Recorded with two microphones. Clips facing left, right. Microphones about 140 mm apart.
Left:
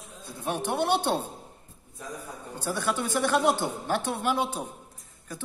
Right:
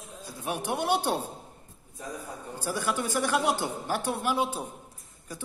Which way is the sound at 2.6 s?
10° right (ahead or behind).